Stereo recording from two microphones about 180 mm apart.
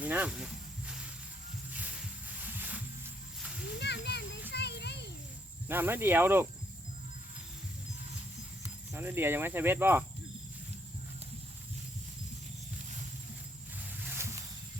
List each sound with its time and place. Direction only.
0.0 s snake: 10° right (ahead or behind)
1.7 s a sound: 10° right (ahead or behind)
3.8 s a sound: 70° left (ahead or behind)
4.5 s children playing: 65° left (ahead or behind)
5.6 s speech: 10° right (ahead or behind)
8.9 s speech: 10° right (ahead or behind)